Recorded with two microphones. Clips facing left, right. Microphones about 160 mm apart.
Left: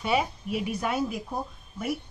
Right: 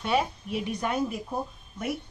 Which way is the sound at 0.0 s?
5° left (ahead or behind).